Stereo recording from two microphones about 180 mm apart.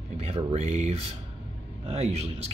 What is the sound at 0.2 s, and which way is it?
A man's voice, 30° right (ahead or behind).